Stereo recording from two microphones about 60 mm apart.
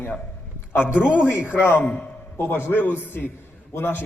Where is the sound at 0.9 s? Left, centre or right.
Centre.